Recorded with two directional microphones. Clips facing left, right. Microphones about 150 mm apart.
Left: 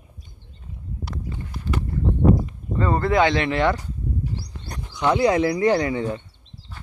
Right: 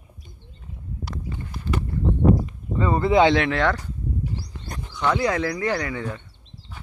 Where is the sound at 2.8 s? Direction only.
10° right (ahead or behind).